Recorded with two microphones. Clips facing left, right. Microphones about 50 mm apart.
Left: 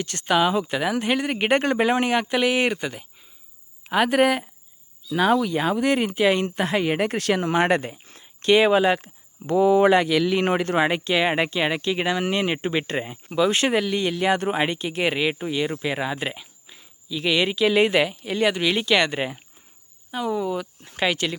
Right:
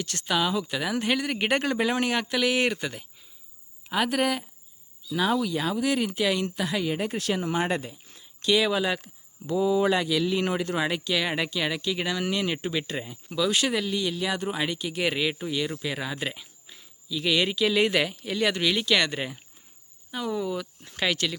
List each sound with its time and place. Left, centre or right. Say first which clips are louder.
0.0 s speech: left 6 dB; left
0.9 s speech: left 3 dB; centre
3.8 s speech: left 6 dB; left
6.6 s speech: left 5 dB; left
6.8 s speech: left 5 dB; left
9.5 s speech: left 6 dB; left
13.9 s speech: left 6 dB; left